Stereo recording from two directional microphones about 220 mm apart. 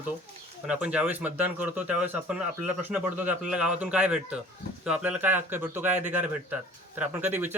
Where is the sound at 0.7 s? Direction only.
5° right (ahead or behind).